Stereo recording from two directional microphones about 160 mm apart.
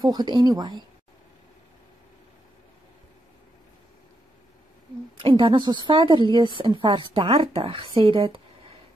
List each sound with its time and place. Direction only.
0.0 s speech: 25° right (ahead or behind)
5.2 s a woman's voice: 30° right (ahead or behind)